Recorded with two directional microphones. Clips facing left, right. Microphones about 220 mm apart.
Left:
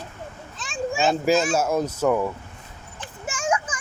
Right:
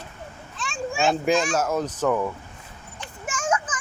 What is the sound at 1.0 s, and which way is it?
Speech, centre (ahead or behind).